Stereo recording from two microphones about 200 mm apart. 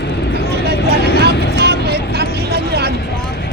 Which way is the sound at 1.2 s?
55° right (ahead or behind).